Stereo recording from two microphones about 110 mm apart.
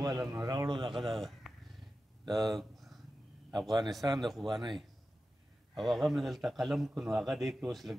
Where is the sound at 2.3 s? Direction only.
35° right (ahead or behind).